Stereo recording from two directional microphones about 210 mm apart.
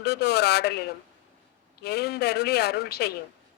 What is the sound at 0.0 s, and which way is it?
A woman's voice, 50° left (ahead or behind).